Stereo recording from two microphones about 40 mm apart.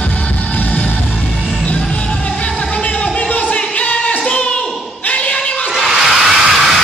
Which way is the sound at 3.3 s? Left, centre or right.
Left.